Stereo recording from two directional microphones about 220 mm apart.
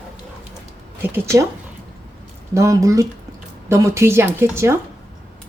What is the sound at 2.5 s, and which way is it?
Speech, 15° right (ahead or behind).